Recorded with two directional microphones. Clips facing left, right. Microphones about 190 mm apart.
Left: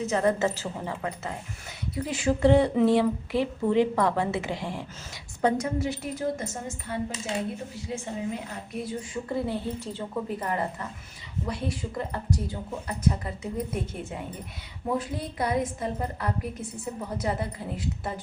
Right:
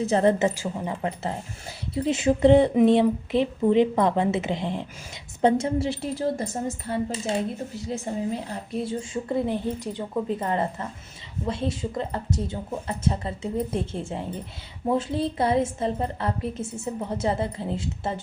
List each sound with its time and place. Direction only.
0.0 s a woman's voice: 30° right (ahead or behind)
0.3 s a woman's voice: 15° right (ahead or behind)
0.9 s speech: 30° right (ahead or behind)